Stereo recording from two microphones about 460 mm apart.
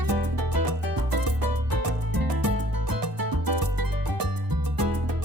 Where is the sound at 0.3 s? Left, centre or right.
Right.